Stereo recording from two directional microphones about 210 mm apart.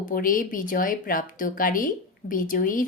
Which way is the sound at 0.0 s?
40° left (ahead or behind).